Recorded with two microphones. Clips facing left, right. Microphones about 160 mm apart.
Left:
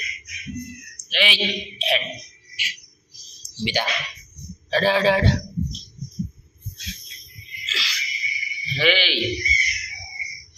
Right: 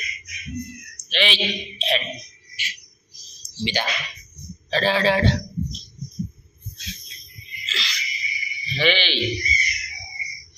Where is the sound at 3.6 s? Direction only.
10° left (ahead or behind).